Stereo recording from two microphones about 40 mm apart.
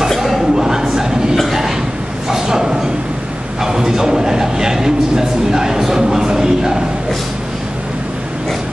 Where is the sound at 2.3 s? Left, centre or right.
Centre.